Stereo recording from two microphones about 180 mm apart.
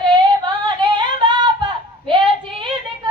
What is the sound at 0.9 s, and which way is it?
Singing, 25° right (ahead or behind).